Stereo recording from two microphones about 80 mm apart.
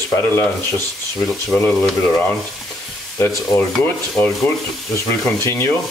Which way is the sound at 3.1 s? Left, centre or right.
Left.